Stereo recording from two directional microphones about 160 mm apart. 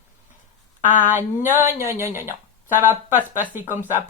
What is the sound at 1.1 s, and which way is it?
Speech, 15° right (ahead or behind).